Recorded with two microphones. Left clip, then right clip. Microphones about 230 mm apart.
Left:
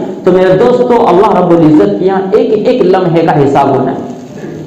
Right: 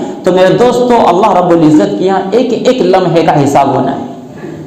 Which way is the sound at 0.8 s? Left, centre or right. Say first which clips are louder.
Even; right.